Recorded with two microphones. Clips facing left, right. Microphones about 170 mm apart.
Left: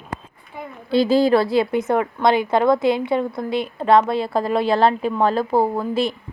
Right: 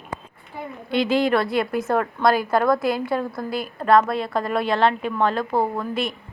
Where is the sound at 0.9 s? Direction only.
35° left (ahead or behind).